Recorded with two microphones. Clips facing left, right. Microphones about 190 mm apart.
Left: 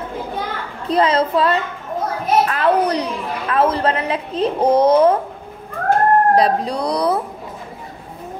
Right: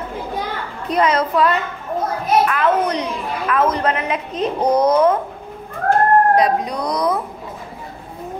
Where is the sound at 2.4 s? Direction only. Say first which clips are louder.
Left 2 dB; 35° left (ahead or behind).